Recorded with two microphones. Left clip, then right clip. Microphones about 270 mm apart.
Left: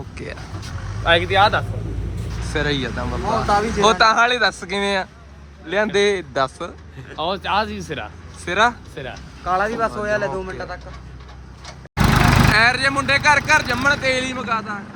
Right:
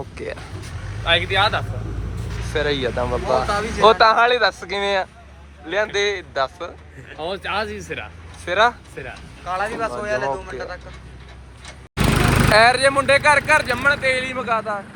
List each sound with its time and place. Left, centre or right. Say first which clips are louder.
0.2 s speech: right 2 dB; centre
1.0 s speech: left 3 dB; left
1.8 s vehicle: left 1 dB; centre
2.5 s speech: right 1 dB; centre
7.4 s speech: left 2 dB; left
8.4 s speech: even; centre
9.0 s speech: left 5 dB; left
10.5 s speech: even; centre
12.5 s speech: right 6 dB; centre